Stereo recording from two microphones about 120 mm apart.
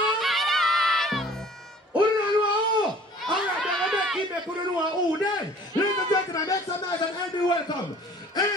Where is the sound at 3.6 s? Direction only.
Centre (ahead or behind).